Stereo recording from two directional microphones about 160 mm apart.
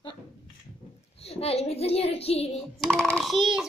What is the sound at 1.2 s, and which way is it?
A child's voice, 40° left (ahead or behind).